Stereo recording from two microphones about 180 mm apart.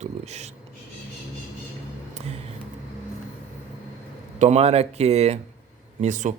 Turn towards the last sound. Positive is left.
turn(degrees=-45)  # may be behind; listen again after turning